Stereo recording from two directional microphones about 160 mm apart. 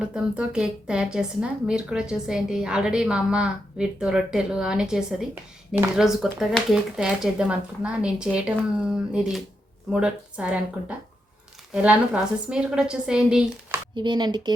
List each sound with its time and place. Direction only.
0.0 s a woman's voice: 5° right (ahead or behind)
13.9 s speech: 30° right (ahead or behind)